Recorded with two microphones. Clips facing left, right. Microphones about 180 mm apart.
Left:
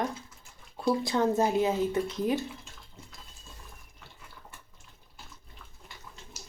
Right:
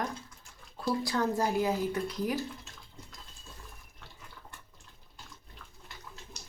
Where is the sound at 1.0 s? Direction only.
25° left (ahead or behind).